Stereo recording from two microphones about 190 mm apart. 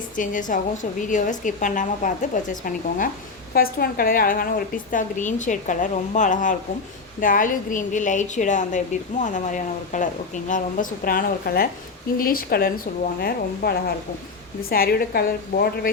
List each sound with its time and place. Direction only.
0.2 s a woman's voice: 45° left (ahead or behind)